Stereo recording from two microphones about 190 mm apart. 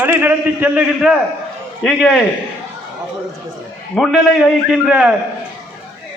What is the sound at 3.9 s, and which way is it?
A man's voice, centre (ahead or behind).